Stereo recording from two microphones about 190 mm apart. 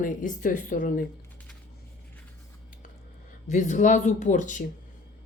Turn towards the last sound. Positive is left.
turn(degrees=40)  # may be behind; listen again after turning